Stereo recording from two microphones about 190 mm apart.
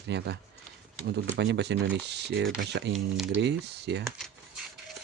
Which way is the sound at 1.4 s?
65° right (ahead or behind).